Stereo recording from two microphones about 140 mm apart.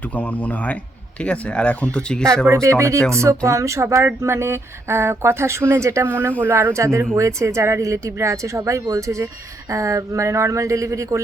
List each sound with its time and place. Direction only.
0.0 s speech: 10° left (ahead or behind)
2.5 s a woman's voice: 20° right (ahead or behind)